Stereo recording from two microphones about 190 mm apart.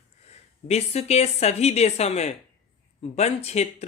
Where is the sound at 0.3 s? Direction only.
35° left (ahead or behind).